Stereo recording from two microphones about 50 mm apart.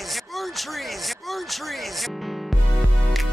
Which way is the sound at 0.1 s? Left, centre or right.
Centre.